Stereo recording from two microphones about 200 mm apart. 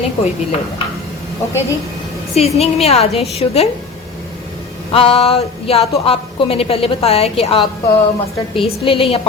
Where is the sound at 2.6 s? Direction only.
30° left (ahead or behind).